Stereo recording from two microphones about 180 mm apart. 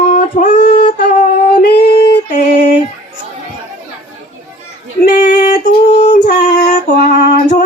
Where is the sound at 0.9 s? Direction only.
45° left (ahead or behind).